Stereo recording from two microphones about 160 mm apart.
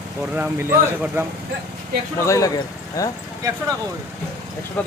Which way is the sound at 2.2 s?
20° left (ahead or behind).